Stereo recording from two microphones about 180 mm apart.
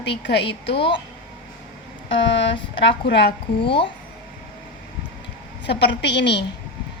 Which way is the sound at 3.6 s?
30° left (ahead or behind).